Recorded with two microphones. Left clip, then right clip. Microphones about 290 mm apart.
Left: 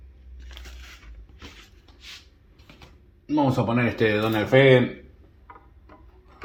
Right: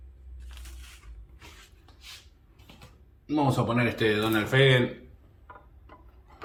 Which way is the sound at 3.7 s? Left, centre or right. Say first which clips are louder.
Left 3 dB; left.